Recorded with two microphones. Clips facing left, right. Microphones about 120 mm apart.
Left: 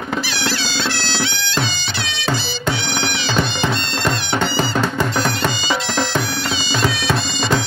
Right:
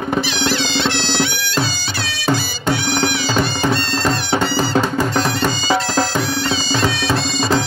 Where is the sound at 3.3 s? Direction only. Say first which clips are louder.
Right 2 dB; 40° right (ahead or behind).